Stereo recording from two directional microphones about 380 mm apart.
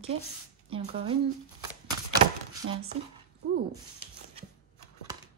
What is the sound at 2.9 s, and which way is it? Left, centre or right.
Speech, centre.